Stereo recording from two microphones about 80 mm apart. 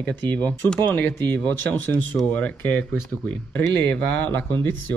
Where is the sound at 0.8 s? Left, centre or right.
Centre.